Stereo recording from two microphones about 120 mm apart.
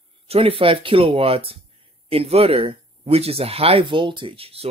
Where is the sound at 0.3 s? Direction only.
50° right (ahead or behind).